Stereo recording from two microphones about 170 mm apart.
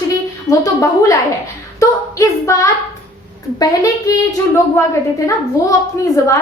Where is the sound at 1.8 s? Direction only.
20° left (ahead or behind).